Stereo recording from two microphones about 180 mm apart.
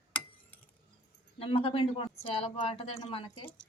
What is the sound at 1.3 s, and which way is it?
A woman's voice, 30° left (ahead or behind).